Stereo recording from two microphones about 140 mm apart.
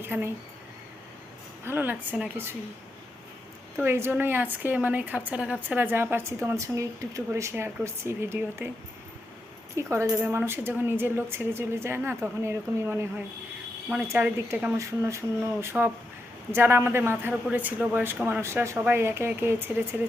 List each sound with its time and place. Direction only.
0.0 s a woman's voice: 15° right (ahead or behind)
1.6 s a woman's voice: 15° right (ahead or behind)
3.8 s a woman's voice: 15° right (ahead or behind)
9.7 s a woman's voice: 20° right (ahead or behind)